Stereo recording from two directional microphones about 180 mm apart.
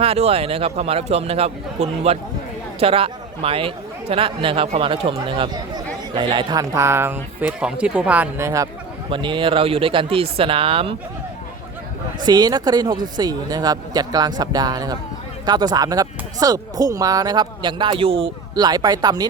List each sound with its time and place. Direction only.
0.0 s a man's voice: 35° right (ahead or behind); by 8.7 s 15° right (ahead or behind)
9.0 s speech: 25° right (ahead or behind)
12.2 s speech: 20° right (ahead or behind)